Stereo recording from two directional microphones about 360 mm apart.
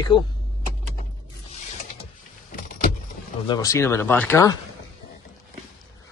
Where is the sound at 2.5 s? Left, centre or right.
Left.